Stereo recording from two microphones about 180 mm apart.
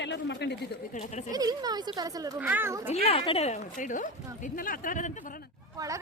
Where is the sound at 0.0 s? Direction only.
75° left (ahead or behind).